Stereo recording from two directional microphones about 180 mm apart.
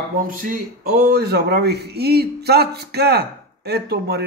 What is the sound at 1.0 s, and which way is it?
A man's voice, 65° right (ahead or behind).